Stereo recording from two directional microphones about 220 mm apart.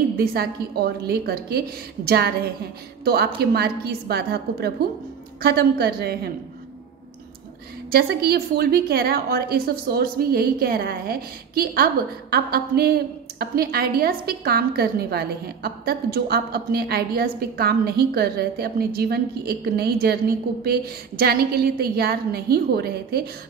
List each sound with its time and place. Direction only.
0.2 s a woman's voice: 45° right (ahead or behind)
7.9 s a woman's voice: 45° right (ahead or behind)